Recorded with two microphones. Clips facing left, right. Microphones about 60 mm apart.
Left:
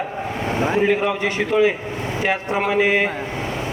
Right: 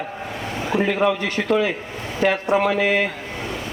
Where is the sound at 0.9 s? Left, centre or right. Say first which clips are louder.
Left 1 dB; left.